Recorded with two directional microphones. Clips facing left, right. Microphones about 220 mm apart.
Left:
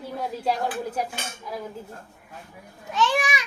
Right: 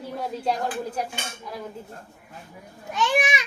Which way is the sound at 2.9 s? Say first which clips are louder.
Even; 20° right (ahead or behind).